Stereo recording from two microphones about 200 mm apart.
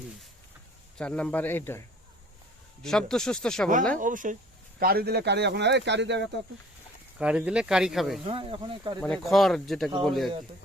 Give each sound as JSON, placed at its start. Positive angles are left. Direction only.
{"t": 0.9, "sound": "speech", "side_deg": 5}
{"t": 2.8, "sound": "speech", "side_deg": 0}
{"t": 3.9, "sound": "speech", "side_deg": -40}
{"t": 7.2, "sound": "speech", "side_deg": -5}
{"t": 8.3, "sound": "speech", "side_deg": -25}
{"t": 9.0, "sound": "speech", "side_deg": 5}